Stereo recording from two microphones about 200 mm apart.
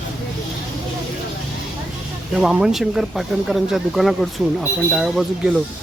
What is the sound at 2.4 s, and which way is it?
Speech, centre (ahead or behind).